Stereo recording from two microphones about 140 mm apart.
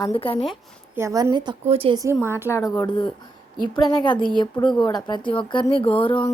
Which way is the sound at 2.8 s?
35° left (ahead or behind).